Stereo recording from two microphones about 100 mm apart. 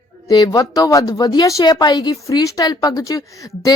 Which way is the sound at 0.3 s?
40° left (ahead or behind).